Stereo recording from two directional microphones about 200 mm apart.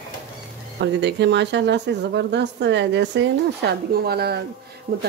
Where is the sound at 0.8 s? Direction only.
60° right (ahead or behind).